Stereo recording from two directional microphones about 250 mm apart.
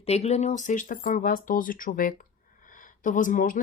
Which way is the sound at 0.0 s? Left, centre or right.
Left.